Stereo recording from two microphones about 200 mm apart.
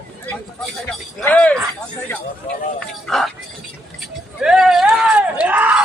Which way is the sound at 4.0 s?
Centre (ahead or behind).